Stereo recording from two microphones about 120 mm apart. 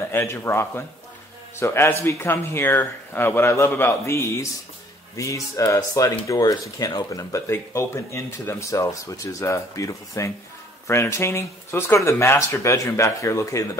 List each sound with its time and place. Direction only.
0.0 s a man's voice: 20° left (ahead or behind)